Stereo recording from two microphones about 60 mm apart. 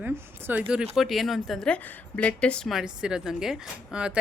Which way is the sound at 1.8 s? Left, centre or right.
Left.